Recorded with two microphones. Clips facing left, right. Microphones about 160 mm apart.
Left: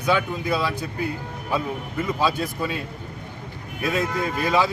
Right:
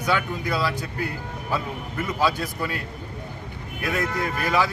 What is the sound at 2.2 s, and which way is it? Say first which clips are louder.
Speech: right 1 dB; 20° left (ahead or behind).